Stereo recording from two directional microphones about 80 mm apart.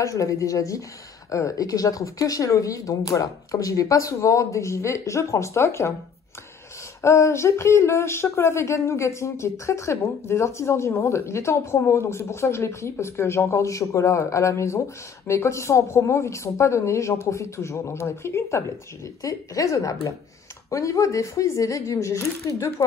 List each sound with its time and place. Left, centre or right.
0.0 s speech: left
7.0 s speech: left